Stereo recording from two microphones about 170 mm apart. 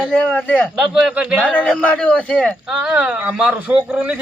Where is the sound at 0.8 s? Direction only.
5° right (ahead or behind).